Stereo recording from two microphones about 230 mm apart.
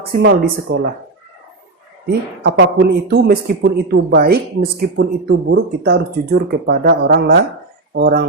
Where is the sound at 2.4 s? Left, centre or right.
Right.